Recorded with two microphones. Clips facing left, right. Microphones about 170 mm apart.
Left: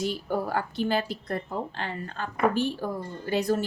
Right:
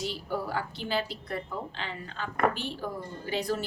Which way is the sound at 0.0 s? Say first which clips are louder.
Left 4 dB; 50° left (ahead or behind).